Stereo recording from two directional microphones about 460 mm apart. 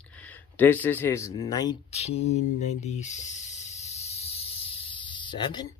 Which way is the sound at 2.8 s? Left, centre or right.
Centre.